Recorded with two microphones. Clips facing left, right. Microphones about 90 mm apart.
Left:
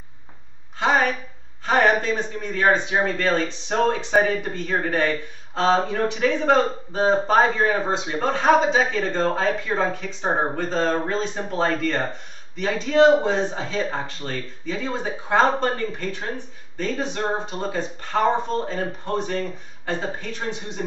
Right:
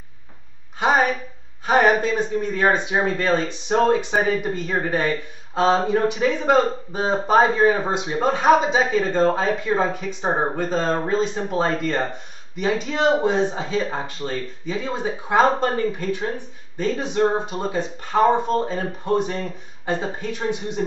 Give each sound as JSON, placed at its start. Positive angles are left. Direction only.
{"t": 0.7, "sound": "speech", "side_deg": -15}